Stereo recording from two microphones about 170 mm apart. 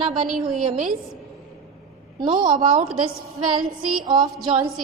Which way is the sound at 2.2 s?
25° right (ahead or behind).